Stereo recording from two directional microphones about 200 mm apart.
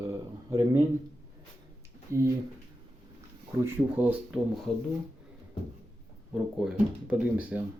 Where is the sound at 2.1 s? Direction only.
15° right (ahead or behind).